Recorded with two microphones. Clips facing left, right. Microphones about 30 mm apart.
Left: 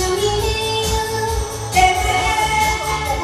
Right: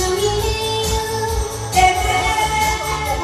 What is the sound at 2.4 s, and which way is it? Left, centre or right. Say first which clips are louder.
Music: left 1 dB; left.